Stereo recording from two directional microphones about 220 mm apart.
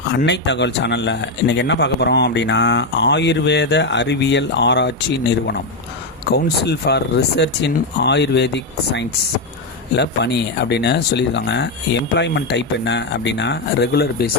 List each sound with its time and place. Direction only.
0.2 s speech: 50° left (ahead or behind)
6.2 s speech: 50° left (ahead or behind)